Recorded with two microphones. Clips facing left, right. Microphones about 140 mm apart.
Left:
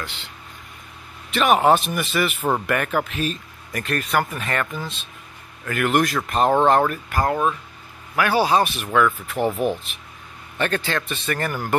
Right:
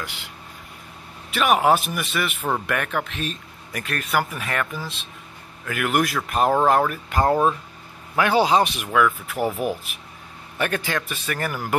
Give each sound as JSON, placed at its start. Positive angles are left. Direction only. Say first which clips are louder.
{"t": 0.0, "sound": "speech", "louder": "even", "side_deg": -10}
{"t": 1.3, "sound": "speech", "louder": "left 2 dB", "side_deg": -5}
{"t": 7.1, "sound": "speech", "louder": "right 2 dB", "side_deg": -25}
{"t": 8.9, "sound": "speech", "louder": "left 1 dB", "side_deg": -5}
{"t": 10.6, "sound": "speech", "louder": "left 1 dB", "side_deg": -10}